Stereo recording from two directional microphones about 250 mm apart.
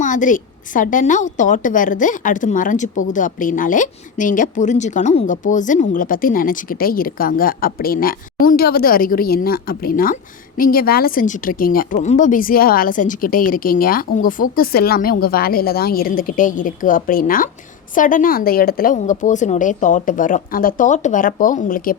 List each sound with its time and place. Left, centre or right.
0.0 s speech: left